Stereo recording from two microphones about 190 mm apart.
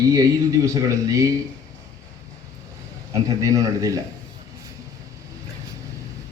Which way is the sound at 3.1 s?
20° right (ahead or behind).